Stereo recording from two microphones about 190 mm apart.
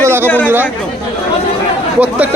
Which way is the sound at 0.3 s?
10° left (ahead or behind).